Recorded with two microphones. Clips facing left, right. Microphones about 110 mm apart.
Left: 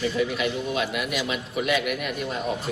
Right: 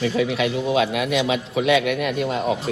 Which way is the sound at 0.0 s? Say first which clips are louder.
Right 4 dB; 80° right.